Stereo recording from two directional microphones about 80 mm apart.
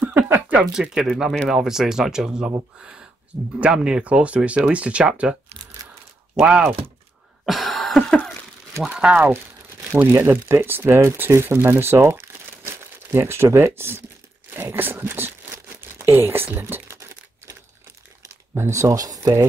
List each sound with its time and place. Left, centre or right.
0.6 s speech: centre
6.4 s speech: centre
7.4 s cough: centre
8.8 s speech: centre
9.9 s speech: right
14.5 s a sound: right
15.8 s speech: right
16.8 s tearing: right
18.6 s speech: right